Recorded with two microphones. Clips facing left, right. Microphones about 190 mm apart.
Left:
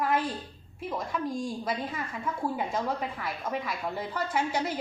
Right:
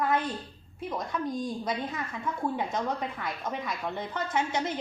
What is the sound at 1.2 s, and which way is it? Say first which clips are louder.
Speech: even; 20° right (ahead or behind).